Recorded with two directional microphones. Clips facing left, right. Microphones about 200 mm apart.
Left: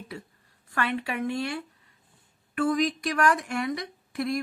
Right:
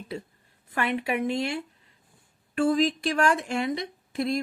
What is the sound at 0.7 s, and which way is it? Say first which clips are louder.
A woman's voice: right 2 dB; 20° right (ahead or behind).